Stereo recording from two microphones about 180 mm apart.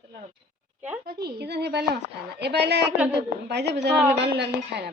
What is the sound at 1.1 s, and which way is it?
A woman's voice, 60° right (ahead or behind).